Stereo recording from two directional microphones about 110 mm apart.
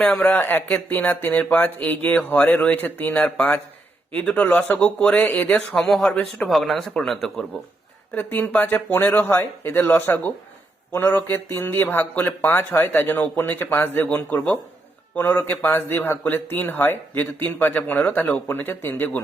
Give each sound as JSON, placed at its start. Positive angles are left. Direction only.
{"t": 0.0, "sound": "speech", "side_deg": 10}
{"t": 8.1, "sound": "a man's voice", "side_deg": 15}